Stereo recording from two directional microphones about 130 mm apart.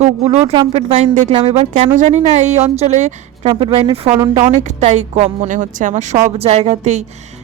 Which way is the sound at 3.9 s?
50° right (ahead or behind).